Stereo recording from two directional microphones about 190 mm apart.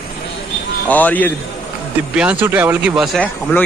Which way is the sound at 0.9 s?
10° left (ahead or behind).